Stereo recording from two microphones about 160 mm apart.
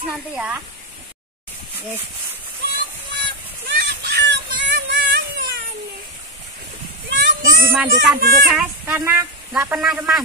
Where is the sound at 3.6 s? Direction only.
90° right.